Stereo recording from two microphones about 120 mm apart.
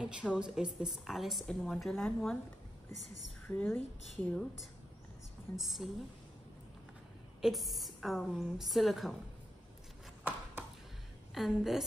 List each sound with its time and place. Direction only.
0.0 s a woman's voice: 5° right (ahead or behind)
3.4 s a woman's voice: 15° left (ahead or behind)
5.6 s a woman's voice: centre (ahead or behind)
7.4 s a woman's voice: centre (ahead or behind)
11.3 s a woman's voice: centre (ahead or behind)